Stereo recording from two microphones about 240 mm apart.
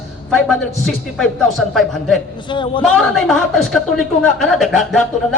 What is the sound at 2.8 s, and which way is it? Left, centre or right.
Music, centre.